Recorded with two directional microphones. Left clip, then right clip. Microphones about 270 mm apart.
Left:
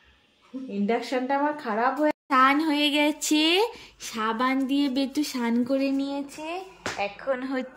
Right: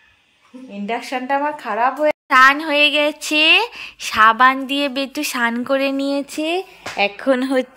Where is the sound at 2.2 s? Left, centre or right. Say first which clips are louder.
Right 9 dB; centre.